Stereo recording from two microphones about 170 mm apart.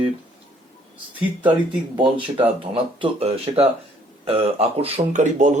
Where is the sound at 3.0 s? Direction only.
35° right (ahead or behind).